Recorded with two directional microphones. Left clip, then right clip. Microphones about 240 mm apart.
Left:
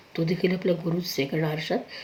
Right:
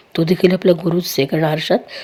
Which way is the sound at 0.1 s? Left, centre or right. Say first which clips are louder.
Right 11 dB; right.